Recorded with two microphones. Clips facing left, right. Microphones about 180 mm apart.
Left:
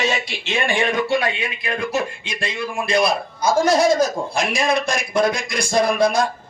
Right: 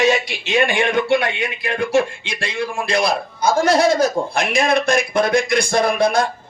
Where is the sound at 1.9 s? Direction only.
75° right (ahead or behind).